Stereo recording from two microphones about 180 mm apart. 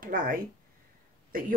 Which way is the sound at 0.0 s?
50° right (ahead or behind).